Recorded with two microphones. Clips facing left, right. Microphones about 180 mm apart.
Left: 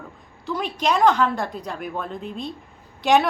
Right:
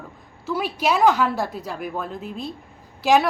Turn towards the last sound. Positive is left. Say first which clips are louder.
# even
turn(degrees=0)  # may be behind; listen again after turning